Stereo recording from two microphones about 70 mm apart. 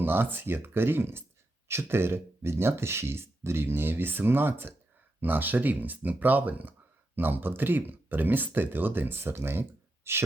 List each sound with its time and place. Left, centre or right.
0.0 s speech: right